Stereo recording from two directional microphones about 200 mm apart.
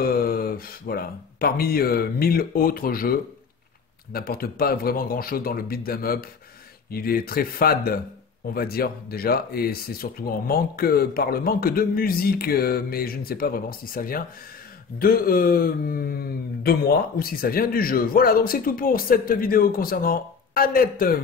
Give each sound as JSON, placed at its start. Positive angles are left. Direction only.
{"t": 0.0, "sound": "speech", "side_deg": 50}